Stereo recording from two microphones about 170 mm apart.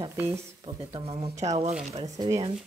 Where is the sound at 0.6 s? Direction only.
35° right (ahead or behind).